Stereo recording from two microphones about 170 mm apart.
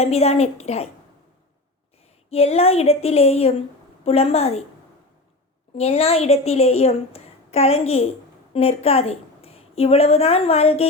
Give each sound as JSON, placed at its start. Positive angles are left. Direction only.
{"t": 0.0, "sound": "a woman's voice", "side_deg": 40}
{"t": 2.3, "sound": "a woman's voice", "side_deg": 35}
{"t": 5.7, "sound": "a woman's voice", "side_deg": 35}